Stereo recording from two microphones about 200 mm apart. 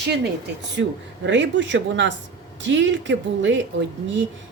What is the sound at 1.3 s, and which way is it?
Speech, 65° right (ahead or behind).